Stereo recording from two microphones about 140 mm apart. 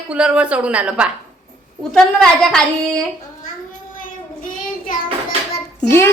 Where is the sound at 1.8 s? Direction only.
5° left (ahead or behind).